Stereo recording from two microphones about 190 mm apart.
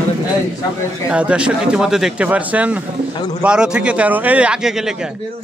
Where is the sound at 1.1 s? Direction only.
5° right (ahead or behind).